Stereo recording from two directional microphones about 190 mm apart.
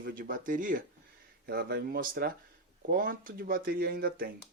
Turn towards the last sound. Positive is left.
turn(degrees=-55)  # may be behind; listen again after turning